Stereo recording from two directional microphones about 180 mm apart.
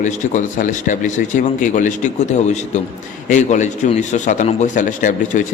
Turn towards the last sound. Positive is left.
turn(degrees=45)  # may be behind; listen again after turning